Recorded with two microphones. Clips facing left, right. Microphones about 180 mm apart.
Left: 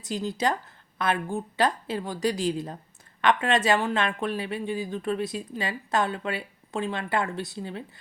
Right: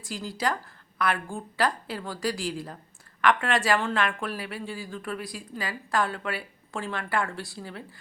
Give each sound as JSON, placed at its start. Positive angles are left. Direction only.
{"t": 0.0, "sound": "a woman's voice", "side_deg": 20}